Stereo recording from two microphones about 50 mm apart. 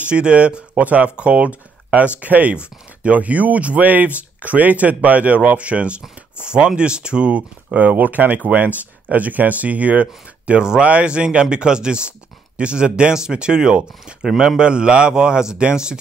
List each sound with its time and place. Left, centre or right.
0.0 s speech: right